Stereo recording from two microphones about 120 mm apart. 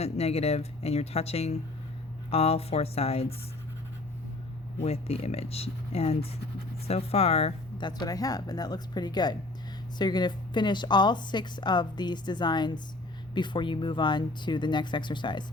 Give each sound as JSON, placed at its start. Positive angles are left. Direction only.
{"t": 0.0, "sound": "speech", "side_deg": 60}
{"t": 4.8, "sound": "speech", "side_deg": 60}
{"t": 7.8, "sound": "a woman's voice", "side_deg": 35}